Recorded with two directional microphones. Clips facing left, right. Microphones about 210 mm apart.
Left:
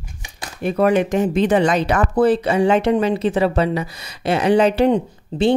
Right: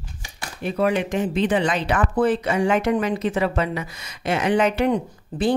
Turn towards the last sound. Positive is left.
turn(degrees=25)  # may be behind; listen again after turning